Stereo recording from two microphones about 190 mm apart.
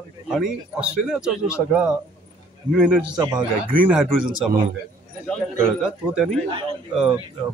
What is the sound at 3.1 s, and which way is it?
Speech, 20° right (ahead or behind).